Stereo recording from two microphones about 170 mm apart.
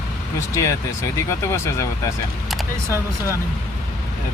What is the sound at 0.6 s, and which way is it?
Speech, 15° left (ahead or behind).